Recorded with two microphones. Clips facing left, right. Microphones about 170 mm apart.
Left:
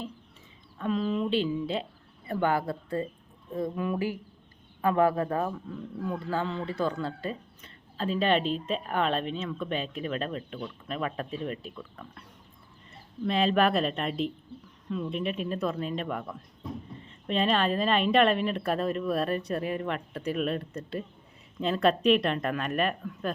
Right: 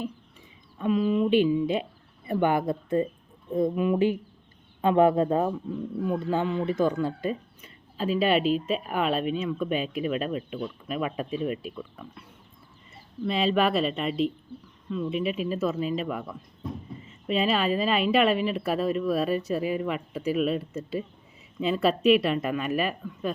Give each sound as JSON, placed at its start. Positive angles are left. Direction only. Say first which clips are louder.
{"t": 0.8, "sound": "speech", "louder": "right 5 dB", "side_deg": -10}
{"t": 13.2, "sound": "speech", "louder": "even", "side_deg": 0}